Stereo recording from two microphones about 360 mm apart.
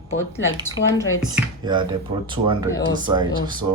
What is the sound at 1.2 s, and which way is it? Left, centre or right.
Speech, centre.